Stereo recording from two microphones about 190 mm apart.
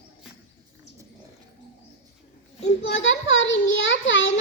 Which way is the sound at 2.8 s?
75° left (ahead or behind).